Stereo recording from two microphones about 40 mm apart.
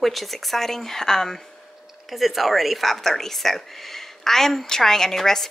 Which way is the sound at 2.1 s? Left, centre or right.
Centre.